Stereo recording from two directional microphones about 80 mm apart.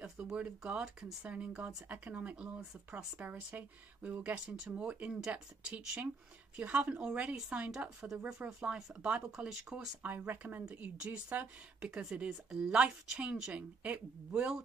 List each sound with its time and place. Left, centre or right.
0.0 s speech: centre
10.0 s speech: right
11.9 s speech: centre